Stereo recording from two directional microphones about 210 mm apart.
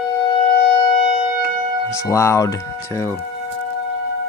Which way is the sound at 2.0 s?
15° left (ahead or behind).